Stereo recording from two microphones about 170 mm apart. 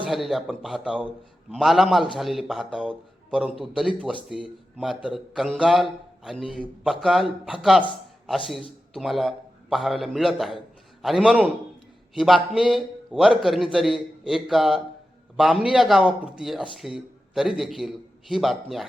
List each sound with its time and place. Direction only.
0.1 s a man's voice: centre (ahead or behind)